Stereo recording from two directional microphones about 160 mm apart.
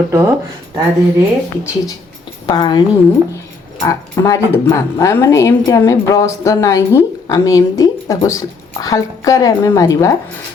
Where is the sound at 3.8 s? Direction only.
20° left (ahead or behind).